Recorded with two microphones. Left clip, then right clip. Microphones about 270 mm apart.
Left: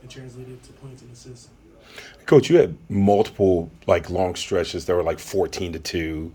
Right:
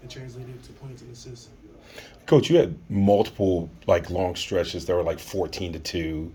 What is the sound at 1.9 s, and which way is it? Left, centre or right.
Speech, centre.